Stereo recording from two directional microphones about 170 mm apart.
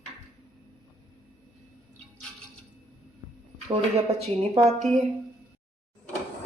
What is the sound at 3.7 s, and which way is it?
Speech, 35° right (ahead or behind).